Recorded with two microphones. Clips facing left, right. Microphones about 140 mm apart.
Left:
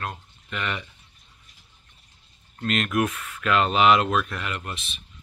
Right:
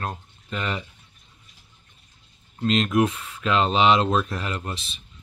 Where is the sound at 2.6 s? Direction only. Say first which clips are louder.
Right 4 dB; 25° right (ahead or behind).